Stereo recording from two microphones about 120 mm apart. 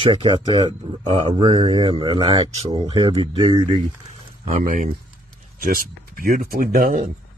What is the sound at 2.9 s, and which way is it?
Speech, 40° right (ahead or behind).